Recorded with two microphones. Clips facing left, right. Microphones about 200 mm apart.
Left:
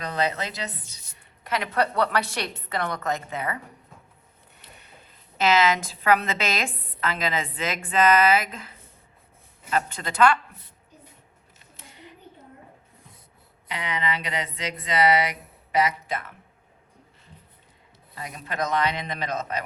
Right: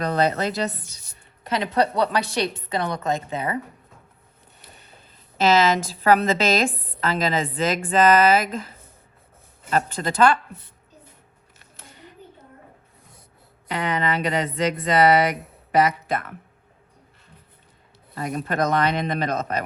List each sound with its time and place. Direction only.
0.0 s speech: 55° right (ahead or behind)
1.5 s a woman's voice: 20° right (ahead or behind)
2.9 s a woman's voice: 30° right (ahead or behind)
5.4 s a woman's voice: 30° right (ahead or behind)
9.6 s a woman's voice: 40° right (ahead or behind)
11.6 s a sound: 55° right (ahead or behind)
13.7 s speech: 50° right (ahead or behind)
18.1 s a man's voice: 50° right (ahead or behind)